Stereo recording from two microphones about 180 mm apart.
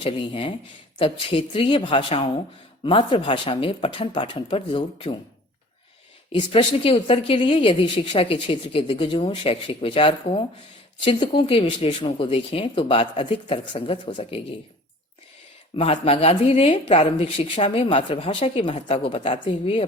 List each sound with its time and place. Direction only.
0.0 s a woman's voice: 30° left (ahead or behind)
6.3 s a woman's voice: 30° left (ahead or behind)
15.7 s speech: 35° left (ahead or behind)